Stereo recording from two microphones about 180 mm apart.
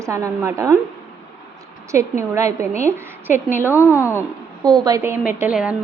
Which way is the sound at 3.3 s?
45° left (ahead or behind).